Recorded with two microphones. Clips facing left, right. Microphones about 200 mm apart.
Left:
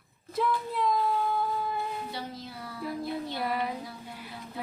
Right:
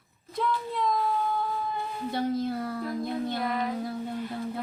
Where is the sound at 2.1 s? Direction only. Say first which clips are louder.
Right 11 dB; 50° right (ahead or behind).